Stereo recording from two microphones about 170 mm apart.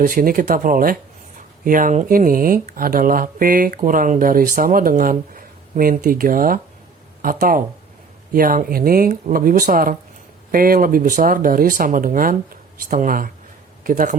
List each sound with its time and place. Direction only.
0.0 s speech: 55° right (ahead or behind)